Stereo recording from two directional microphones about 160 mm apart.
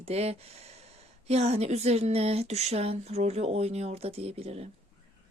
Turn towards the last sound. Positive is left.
turn(degrees=-40)  # may be behind; listen again after turning